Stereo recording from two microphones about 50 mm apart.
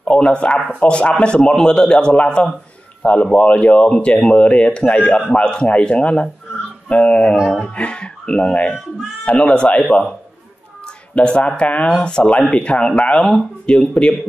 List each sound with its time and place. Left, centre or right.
0.0 s a man's voice: left
7.3 s speech: centre
7.7 s speech: left
11.1 s speech: left
13.2 s a man's voice: centre